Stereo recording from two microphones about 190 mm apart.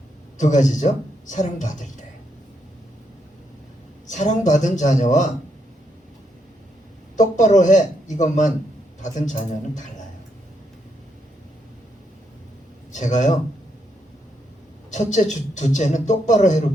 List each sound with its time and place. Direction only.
0.3 s speech: 40° left (ahead or behind)
4.1 s a man's voice: 40° left (ahead or behind)
7.2 s a man's voice: 40° left (ahead or behind)
12.9 s a man's voice: 40° left (ahead or behind)
14.8 s a man's voice: 40° left (ahead or behind)